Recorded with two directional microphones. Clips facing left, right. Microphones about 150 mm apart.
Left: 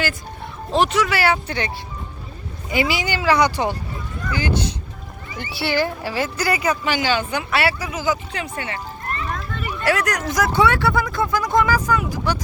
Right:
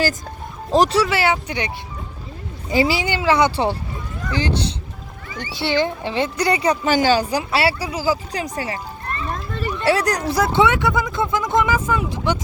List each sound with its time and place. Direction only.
0.7 s speech: 35° right (ahead or behind); by 1.7 s 15° right (ahead or behind)
2.6 s speech: 35° right (ahead or behind)
5.4 s speech: 20° right (ahead or behind); by 8.8 s 35° right (ahead or behind)
9.8 s speech: 30° right (ahead or behind)